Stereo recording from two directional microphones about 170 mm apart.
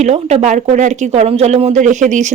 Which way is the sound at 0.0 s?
40° right (ahead or behind).